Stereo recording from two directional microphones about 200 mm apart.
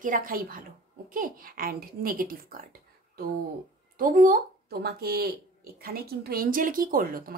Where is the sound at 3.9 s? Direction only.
45° right (ahead or behind).